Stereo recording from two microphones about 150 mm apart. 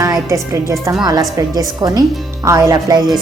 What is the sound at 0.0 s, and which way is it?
A woman's voice, 20° right (ahead or behind).